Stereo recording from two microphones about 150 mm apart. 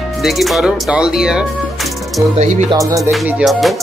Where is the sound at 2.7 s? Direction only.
20° right (ahead or behind).